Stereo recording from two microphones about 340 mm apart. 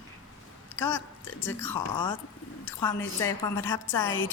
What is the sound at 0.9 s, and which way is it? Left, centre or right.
Speech, left.